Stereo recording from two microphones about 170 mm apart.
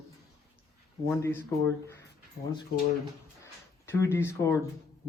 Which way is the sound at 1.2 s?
15° left (ahead or behind).